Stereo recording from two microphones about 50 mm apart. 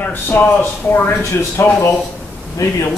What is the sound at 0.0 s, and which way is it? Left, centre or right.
Speech, left.